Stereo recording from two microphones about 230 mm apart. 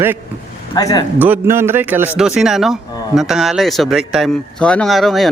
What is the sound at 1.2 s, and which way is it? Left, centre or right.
A man's voice, centre.